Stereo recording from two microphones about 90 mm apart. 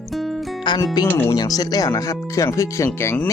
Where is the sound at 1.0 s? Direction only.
45° left (ahead or behind).